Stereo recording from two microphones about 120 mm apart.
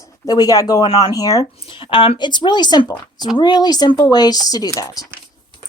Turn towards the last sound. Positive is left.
turn(degrees=30)  # may be behind; listen again after turning